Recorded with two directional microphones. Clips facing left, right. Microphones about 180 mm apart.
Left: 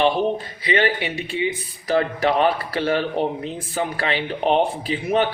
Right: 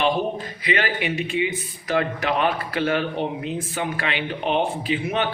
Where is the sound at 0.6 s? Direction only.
30° left (ahead or behind).